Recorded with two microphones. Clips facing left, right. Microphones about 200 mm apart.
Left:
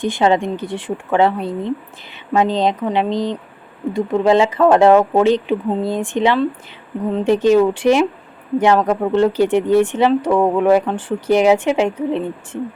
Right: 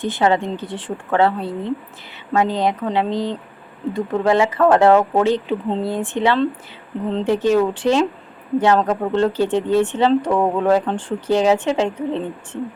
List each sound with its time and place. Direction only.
0.0 s speech: 15° left (ahead or behind)